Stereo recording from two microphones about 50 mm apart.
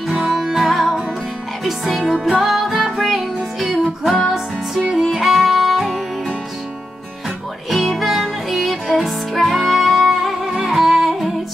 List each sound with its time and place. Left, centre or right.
0.3 s music: centre
2.1 s music: centre
2.4 s music: centre
5.2 s music: centre
7.7 s music: centre